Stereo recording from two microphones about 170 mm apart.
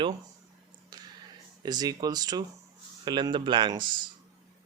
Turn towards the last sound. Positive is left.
turn(degrees=-25)  # may be behind; listen again after turning